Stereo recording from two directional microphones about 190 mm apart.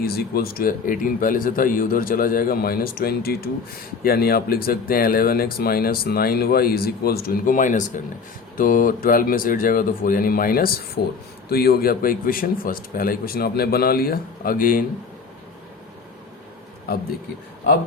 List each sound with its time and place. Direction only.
0.0 s speech: 55° left (ahead or behind)